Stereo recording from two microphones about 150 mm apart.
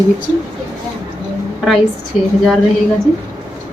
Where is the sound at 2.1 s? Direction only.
5° right (ahead or behind).